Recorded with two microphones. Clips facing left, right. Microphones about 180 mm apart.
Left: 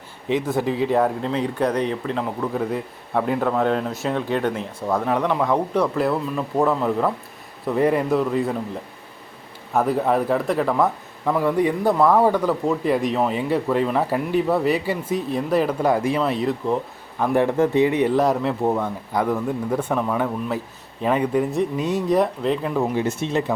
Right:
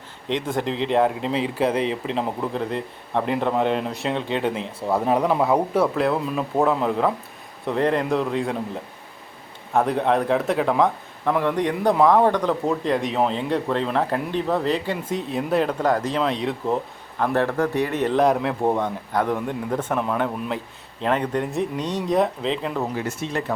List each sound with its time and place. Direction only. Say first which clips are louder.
0.3 s speech: left 3 dB; 5° left (ahead or behind)
2.0 s speech: even; 25° right (ahead or behind)
2.5 s speech: left 2 dB; 5° left (ahead or behind)
4.8 s a man's voice: right 1 dB; 15° right (ahead or behind)
17.2 s a man's voice: left 3 dB; 15° left (ahead or behind)
19.9 s a man's voice: left 1 dB; 5° right (ahead or behind)
23.0 s speech: left 4 dB; 25° left (ahead or behind)